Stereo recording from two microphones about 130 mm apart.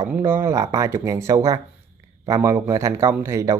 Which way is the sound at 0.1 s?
20° right (ahead or behind).